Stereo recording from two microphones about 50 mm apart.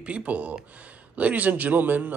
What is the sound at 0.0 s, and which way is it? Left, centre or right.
Speech, right.